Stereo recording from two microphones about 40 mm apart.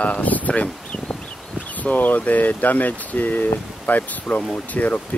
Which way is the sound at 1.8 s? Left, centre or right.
Left.